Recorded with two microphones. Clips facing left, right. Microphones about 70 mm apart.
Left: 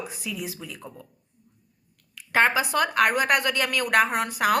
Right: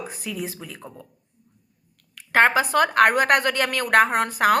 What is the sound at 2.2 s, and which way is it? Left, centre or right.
A woman's voice, right.